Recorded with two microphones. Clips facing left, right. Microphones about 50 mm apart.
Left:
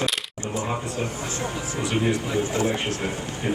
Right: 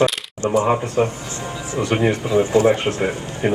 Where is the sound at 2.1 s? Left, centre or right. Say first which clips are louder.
Right 6 dB; right.